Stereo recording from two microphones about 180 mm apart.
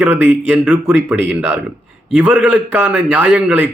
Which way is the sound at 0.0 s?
5° right (ahead or behind).